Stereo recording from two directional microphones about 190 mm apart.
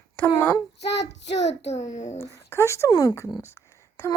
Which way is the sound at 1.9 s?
40° left (ahead or behind).